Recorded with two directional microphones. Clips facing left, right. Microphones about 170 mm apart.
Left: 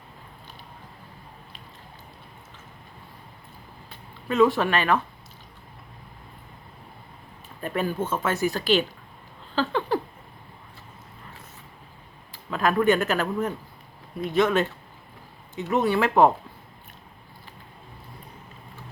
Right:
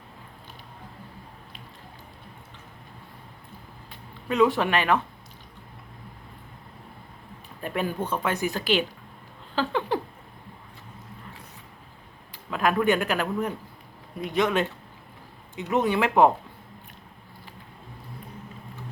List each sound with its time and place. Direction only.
4.3 s speech: 15° right (ahead or behind)
7.6 s speech: 15° right (ahead or behind)
9.6 s a sound: 15° right (ahead or behind)
12.3 s speech: 10° right (ahead or behind)